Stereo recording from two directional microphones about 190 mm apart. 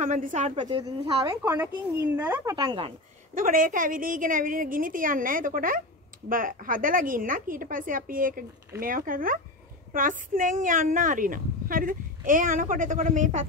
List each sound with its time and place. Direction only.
0.0 s a woman's voice: 40° right (ahead or behind)
0.6 s speech: 25° right (ahead or behind)
3.3 s a woman's voice: 45° right (ahead or behind)